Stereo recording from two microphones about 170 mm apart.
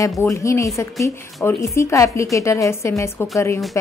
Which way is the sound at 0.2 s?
15° left (ahead or behind).